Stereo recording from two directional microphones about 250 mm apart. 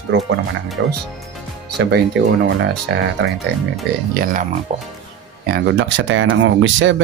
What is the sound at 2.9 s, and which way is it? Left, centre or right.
Speech, right.